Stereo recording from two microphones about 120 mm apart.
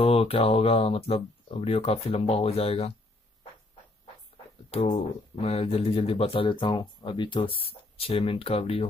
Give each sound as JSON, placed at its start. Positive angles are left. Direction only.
{"t": 0.0, "sound": "speech", "side_deg": 55}
{"t": 4.6, "sound": "speech", "side_deg": 55}